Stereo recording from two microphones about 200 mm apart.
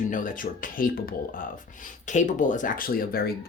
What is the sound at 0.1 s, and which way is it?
Speech, 40° left (ahead or behind).